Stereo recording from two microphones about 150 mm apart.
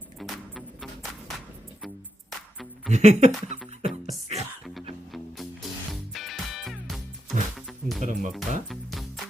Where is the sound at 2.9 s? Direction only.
50° right (ahead or behind).